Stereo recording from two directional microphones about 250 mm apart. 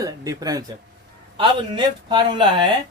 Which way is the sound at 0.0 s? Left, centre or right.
Centre.